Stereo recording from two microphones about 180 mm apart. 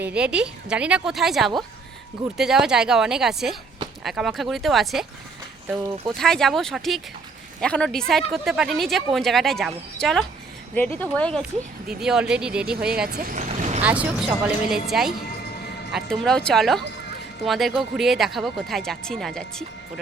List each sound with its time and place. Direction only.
0.0 s speech: 5° right (ahead or behind)
6.1 s speech: 5° left (ahead or behind)
13.1 s speech: 55° right (ahead or behind)
13.5 s vehicle: 40° right (ahead or behind)
13.8 s speech: 5° right (ahead or behind)